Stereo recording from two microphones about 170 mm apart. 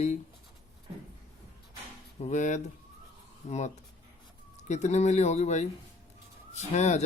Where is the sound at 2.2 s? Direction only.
45° left (ahead or behind).